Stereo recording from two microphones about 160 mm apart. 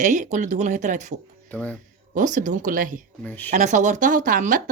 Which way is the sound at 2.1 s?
50° right (ahead or behind).